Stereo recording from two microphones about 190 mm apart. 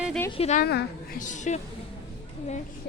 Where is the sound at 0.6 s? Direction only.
60° left (ahead or behind).